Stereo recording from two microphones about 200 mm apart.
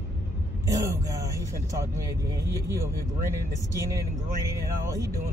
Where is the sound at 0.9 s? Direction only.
15° right (ahead or behind).